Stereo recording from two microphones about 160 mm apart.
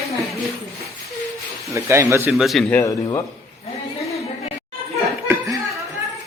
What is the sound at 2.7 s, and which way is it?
Speech, 20° left (ahead or behind).